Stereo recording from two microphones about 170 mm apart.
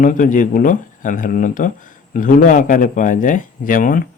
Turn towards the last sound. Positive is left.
turn(degrees=55)  # may be behind; listen again after turning